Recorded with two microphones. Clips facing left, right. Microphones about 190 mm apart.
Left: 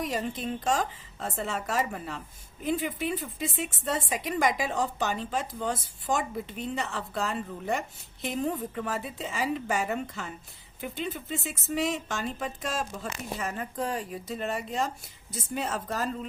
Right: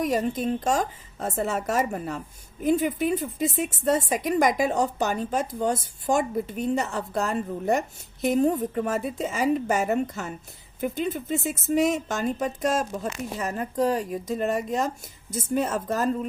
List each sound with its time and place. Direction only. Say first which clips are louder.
0.0 s a woman's voice: right 7 dB; 45° right (ahead or behind)